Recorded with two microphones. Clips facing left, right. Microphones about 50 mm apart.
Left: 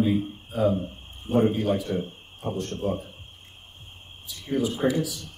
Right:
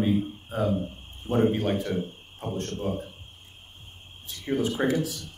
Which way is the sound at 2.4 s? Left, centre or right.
Right.